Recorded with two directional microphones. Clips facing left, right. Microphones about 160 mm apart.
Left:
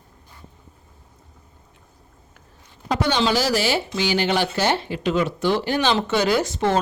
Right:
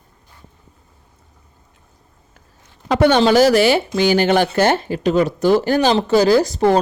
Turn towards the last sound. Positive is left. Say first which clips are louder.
# right 7 dB
turn(degrees=-40)  # may be behind; listen again after turning